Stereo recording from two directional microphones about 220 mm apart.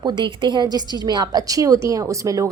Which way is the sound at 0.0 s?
20° right (ahead or behind).